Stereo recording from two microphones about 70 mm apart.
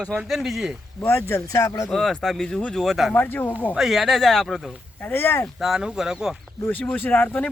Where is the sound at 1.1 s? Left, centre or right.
Left.